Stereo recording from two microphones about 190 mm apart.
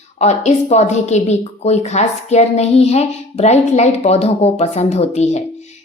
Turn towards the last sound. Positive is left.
turn(degrees=35)  # may be behind; listen again after turning